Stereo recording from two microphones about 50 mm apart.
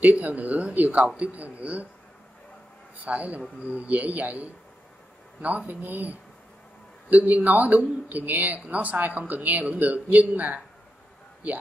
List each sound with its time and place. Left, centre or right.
0.0 s speech: right
3.0 s speech: right